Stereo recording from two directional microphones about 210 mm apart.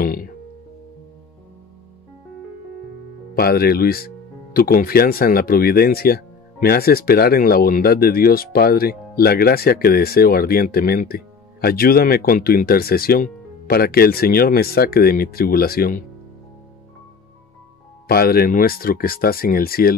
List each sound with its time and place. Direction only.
0.0 s music: 40° left (ahead or behind)
3.3 s speech: 45° left (ahead or behind)
18.0 s speech: 45° left (ahead or behind)